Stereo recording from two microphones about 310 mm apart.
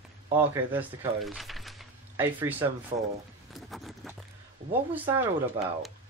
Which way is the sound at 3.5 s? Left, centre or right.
Centre.